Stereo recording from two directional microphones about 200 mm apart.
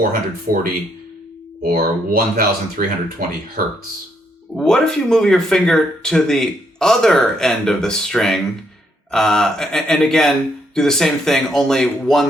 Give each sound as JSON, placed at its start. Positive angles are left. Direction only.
{"t": 0.5, "sound": "speech", "side_deg": -45}
{"t": 1.7, "sound": "speech", "side_deg": -50}
{"t": 4.5, "sound": "speech", "side_deg": 5}